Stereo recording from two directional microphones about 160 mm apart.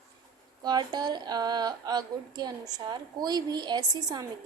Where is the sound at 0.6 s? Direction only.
25° right (ahead or behind).